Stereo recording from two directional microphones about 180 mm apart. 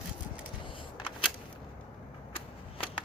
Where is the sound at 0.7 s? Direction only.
25° left (ahead or behind).